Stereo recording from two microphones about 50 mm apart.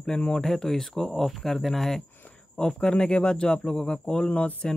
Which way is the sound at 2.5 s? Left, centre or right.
Centre.